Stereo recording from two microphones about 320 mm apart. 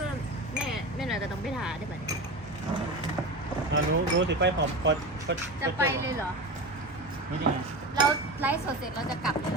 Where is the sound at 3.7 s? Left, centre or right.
Right.